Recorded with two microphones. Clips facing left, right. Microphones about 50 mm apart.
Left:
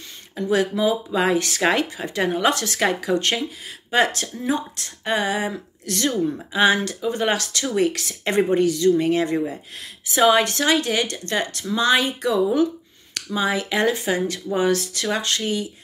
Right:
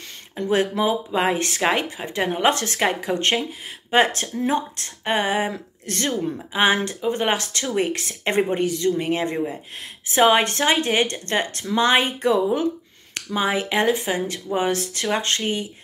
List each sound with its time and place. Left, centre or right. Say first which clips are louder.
0.5 s speech: even; right
10.0 s speech: even; right